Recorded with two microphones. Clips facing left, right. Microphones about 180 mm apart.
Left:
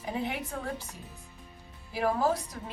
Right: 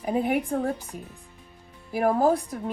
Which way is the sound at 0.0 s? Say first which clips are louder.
Right 9 dB; 50° right (ahead or behind).